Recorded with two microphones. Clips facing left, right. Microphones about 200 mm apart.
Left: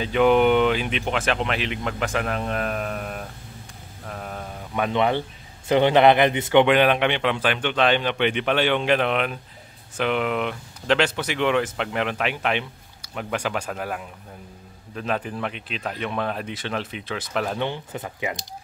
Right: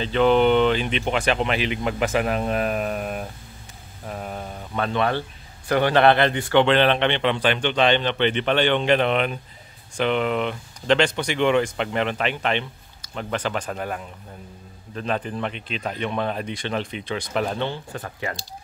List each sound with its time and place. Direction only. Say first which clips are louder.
0.0 s speech: even; 10° left (ahead or behind); by 3.3 s 10° right (ahead or behind)
4.1 s a sound: right 2 dB; 5° right (ahead or behind)
4.7 s speech: left 1 dB; 15° left (ahead or behind)
17.6 s speech: even; 15° left (ahead or behind)